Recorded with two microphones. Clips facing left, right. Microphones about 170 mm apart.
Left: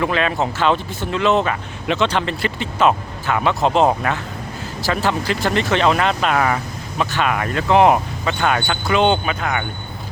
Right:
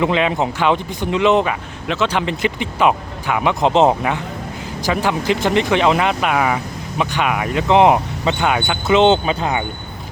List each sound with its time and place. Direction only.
0.0 s speech: 15° right (ahead or behind)